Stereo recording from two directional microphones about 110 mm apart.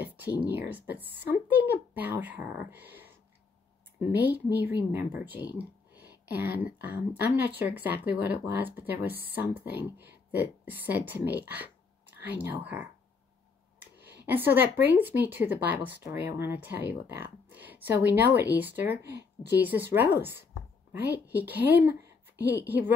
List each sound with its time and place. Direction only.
0.0 s speech: 15° right (ahead or behind)
4.2 s speech: 15° right (ahead or behind)
13.9 s speech: 15° right (ahead or behind)